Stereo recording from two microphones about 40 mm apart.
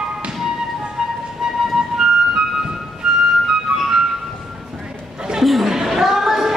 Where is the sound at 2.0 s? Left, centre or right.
Centre.